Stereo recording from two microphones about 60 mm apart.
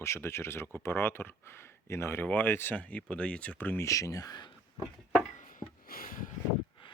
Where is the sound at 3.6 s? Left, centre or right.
Left.